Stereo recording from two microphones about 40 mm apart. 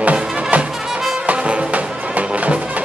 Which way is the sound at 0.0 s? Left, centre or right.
Right.